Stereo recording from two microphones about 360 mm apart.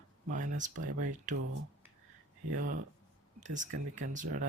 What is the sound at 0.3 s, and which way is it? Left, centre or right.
Speech, right.